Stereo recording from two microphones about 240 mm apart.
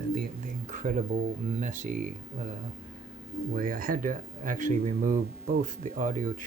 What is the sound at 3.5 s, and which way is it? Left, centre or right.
Speech, right.